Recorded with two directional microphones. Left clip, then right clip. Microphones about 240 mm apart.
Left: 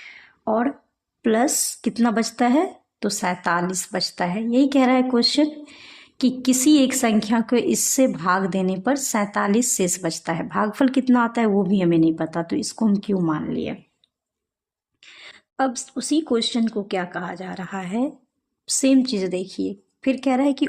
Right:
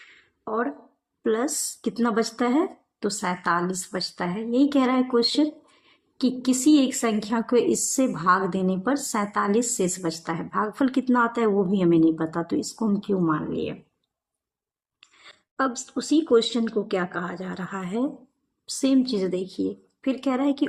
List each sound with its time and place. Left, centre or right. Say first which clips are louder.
0.4 s a woman's voice: left 5 dB; left
15.2 s a woman's voice: left 3 dB; left